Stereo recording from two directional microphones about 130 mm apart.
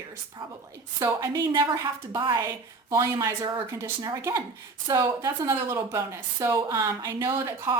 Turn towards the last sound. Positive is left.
turn(degrees=-20)  # may be behind; listen again after turning